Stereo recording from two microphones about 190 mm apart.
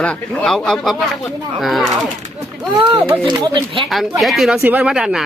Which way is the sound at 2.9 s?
25° right (ahead or behind).